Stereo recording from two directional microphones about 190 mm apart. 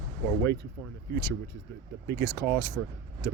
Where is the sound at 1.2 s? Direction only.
50° right (ahead or behind).